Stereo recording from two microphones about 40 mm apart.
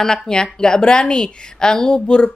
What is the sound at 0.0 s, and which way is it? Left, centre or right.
A woman's voice, centre.